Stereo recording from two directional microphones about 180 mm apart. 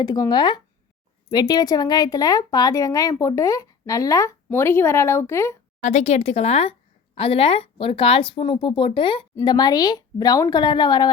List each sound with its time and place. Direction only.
0.0 s a woman's voice: 20° left (ahead or behind)
5.8 s speech: 35° left (ahead or behind)